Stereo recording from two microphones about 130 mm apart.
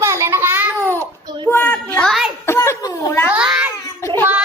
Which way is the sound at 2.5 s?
20° left (ahead or behind).